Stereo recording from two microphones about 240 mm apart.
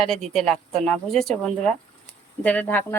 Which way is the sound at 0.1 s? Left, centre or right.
Centre.